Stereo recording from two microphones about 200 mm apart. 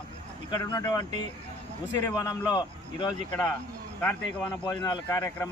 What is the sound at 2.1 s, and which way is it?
Speech, 20° left (ahead or behind).